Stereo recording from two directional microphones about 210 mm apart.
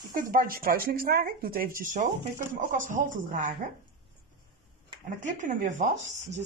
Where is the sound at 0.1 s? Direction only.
40° right (ahead or behind).